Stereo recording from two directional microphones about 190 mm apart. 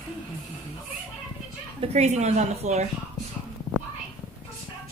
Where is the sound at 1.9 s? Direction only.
35° right (ahead or behind).